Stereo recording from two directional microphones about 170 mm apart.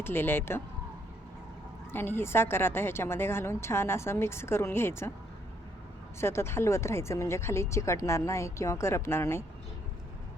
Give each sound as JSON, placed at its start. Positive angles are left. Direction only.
{"t": 0.0, "sound": "a woman's voice", "side_deg": 15}
{"t": 1.9, "sound": "a woman's voice", "side_deg": 15}
{"t": 6.1, "sound": "a woman's voice", "side_deg": 15}